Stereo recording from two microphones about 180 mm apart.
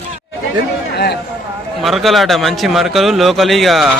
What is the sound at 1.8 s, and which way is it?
A man's voice, centre (ahead or behind).